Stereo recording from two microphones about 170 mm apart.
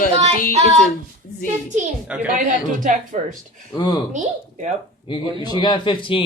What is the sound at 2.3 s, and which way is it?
Speech, 50° right (ahead or behind).